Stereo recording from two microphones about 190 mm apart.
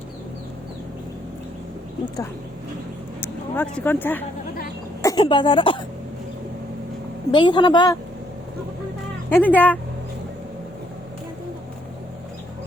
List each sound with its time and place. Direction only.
3.2 s speech: 10° left (ahead or behind)
5.0 s speech: 25° left (ahead or behind)
7.3 s speech: 25° left (ahead or behind)
9.3 s speech: 10° left (ahead or behind)